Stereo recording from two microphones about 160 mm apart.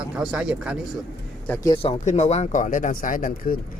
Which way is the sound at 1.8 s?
40° left (ahead or behind).